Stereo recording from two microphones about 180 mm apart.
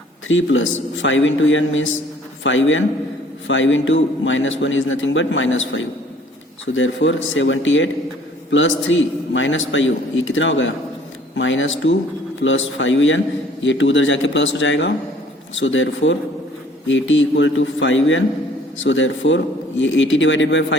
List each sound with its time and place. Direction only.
0.3 s a man's voice: 90° left